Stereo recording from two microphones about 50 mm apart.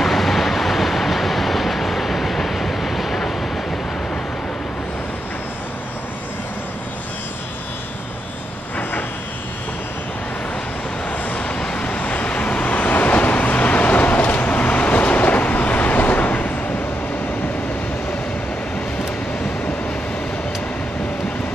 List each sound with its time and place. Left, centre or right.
0.0 s train: centre
3.2 s vehicle: centre
11.1 s vehicle: left